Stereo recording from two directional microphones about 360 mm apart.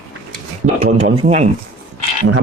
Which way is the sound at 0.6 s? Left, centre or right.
Centre.